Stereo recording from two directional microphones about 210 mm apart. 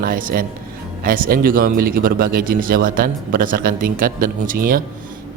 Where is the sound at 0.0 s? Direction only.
40° right (ahead or behind).